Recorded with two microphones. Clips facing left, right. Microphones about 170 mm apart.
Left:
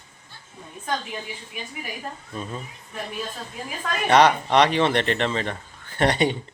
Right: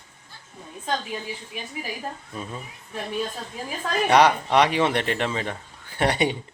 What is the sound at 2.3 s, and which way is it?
Speech, 5° right (ahead or behind).